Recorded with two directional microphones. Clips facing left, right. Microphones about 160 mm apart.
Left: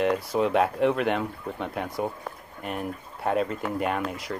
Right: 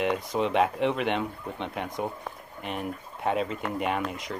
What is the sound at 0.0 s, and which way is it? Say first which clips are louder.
Speech: left 3 dB; 5° left (ahead or behind).